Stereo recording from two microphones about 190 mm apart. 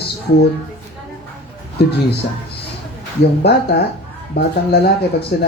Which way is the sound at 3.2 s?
60° left (ahead or behind).